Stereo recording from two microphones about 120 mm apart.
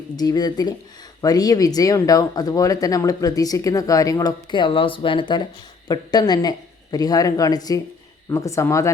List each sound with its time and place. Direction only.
0.2 s speech: 35° left (ahead or behind)